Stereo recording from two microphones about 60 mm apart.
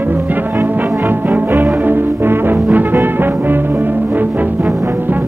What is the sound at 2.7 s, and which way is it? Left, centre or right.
Brass instrument, right.